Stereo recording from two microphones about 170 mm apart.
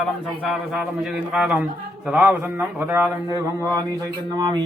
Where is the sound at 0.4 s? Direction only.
Centre (ahead or behind).